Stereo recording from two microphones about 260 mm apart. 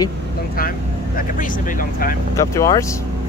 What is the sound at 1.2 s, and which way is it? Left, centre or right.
Speech, left.